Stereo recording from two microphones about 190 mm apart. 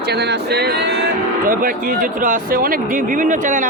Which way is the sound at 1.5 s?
50° right (ahead or behind).